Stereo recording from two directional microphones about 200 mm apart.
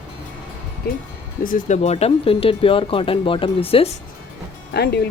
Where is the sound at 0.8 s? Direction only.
50° left (ahead or behind); by 3.9 s 30° left (ahead or behind).